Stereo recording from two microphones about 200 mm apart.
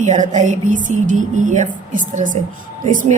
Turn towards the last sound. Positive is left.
turn(degrees=-40)  # may be behind; listen again after turning